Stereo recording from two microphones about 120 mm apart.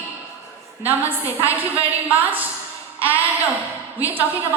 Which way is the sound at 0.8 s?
15° right (ahead or behind).